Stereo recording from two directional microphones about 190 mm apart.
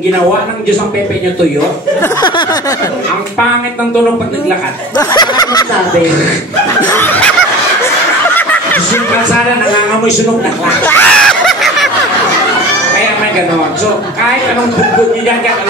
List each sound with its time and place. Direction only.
2.0 s speech: 25° left (ahead or behind)
4.9 s speech: 20° left (ahead or behind)
7.0 s snicker: 10° left (ahead or behind)
8.4 s snicker: 10° left (ahead or behind)
10.9 s snicker: 5° left (ahead or behind)